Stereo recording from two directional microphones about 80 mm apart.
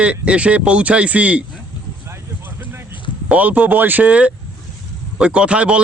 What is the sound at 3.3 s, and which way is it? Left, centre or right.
Speech, centre.